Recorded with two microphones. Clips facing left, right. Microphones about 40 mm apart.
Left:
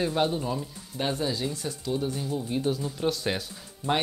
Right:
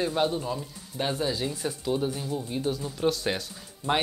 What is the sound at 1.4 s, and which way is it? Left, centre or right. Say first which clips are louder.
Speech: right 2 dB; centre.